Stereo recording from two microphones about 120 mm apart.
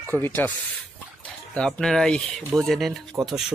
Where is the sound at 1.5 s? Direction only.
5° left (ahead or behind).